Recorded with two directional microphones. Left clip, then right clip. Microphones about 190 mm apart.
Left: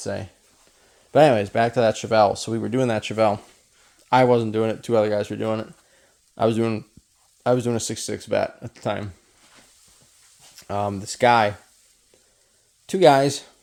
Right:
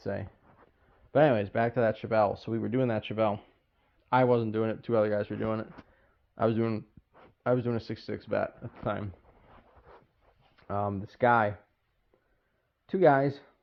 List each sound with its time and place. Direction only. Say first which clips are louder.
0.0 s speech: left 6 dB; 30° left (ahead or behind)
1.1 s speech: left 8 dB; 40° left (ahead or behind)
10.6 s speech: left 7 dB; 30° left (ahead or behind)
12.8 s speech: left 8 dB; 30° left (ahead or behind)